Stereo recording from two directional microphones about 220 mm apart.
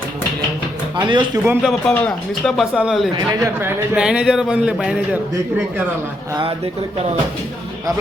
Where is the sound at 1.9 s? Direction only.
5° left (ahead or behind).